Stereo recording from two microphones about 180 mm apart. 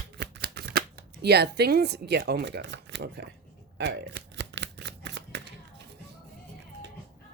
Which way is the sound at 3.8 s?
65° right (ahead or behind).